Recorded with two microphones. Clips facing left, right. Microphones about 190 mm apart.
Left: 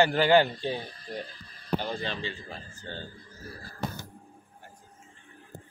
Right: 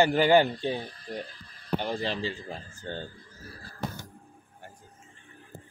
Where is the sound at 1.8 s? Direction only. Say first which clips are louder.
Right 3 dB; 25° right (ahead or behind).